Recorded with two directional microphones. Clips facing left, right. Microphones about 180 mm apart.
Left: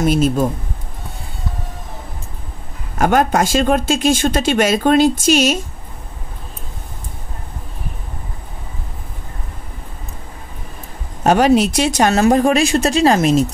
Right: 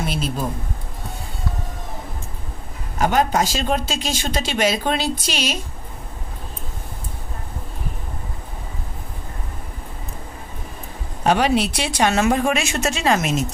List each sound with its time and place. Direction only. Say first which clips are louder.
0.0 s speech: left 10 dB; 45° left (ahead or behind)
3.0 s speech: left 4 dB; 50° left (ahead or behind)
11.2 s speech: left 6 dB; 45° left (ahead or behind)